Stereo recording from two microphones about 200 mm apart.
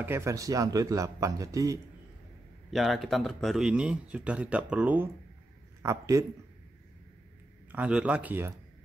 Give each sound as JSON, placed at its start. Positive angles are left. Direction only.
{"t": 0.0, "sound": "a man's voice", "side_deg": -15}
{"t": 2.7, "sound": "a man's voice", "side_deg": 0}
{"t": 7.7, "sound": "a man's voice", "side_deg": -5}